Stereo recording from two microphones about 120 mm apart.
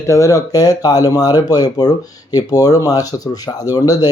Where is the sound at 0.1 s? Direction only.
25° left (ahead or behind).